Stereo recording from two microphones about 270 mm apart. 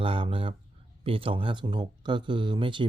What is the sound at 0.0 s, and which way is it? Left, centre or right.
Speech, centre.